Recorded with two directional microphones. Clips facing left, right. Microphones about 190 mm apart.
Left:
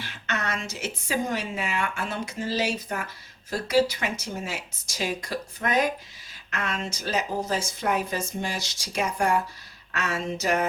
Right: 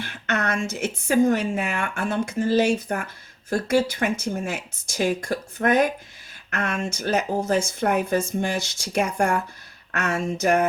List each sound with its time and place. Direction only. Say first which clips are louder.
0.0 s a woman's voice: right 5 dB; 55° right (ahead or behind)